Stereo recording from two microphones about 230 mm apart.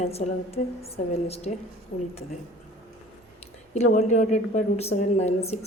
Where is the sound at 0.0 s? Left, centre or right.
Left.